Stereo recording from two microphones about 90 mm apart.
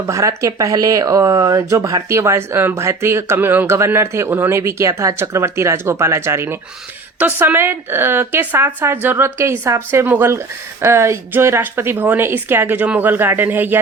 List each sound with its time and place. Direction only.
0.1 s speech: 35° right (ahead or behind)